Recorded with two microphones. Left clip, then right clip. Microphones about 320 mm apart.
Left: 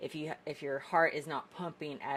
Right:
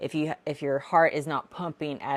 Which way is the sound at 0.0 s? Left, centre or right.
Right.